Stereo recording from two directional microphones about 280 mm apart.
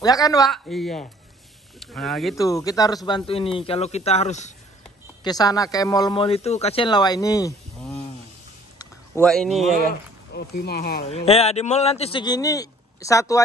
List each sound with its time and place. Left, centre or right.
0.0 s a man's voice: centre
0.5 s speech: centre
2.3 s a man's voice: centre
5.2 s a man's voice: centre
8.7 s a sound: centre
10.3 s speech: left
11.1 s a man's voice: left